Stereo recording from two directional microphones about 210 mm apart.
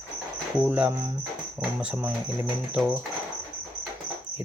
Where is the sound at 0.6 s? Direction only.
10° right (ahead or behind).